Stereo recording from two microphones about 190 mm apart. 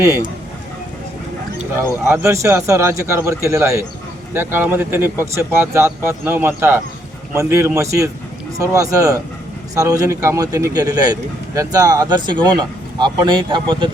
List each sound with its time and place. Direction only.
2.0 s a man's voice: 15° right (ahead or behind)